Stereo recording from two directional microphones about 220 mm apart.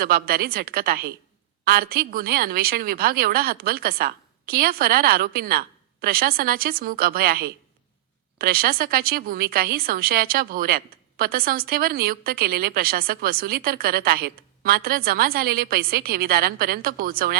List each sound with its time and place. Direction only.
0.0 s speech: 40° right (ahead or behind)